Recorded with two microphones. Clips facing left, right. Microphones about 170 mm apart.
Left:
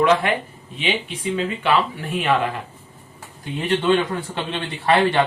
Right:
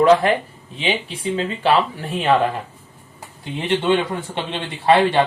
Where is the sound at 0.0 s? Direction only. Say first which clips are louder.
Right 4 dB; 35° right (ahead or behind).